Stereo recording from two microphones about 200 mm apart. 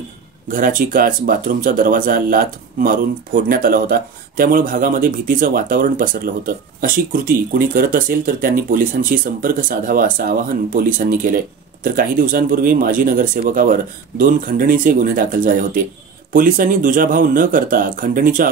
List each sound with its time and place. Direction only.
0.5 s speech: 45° right (ahead or behind)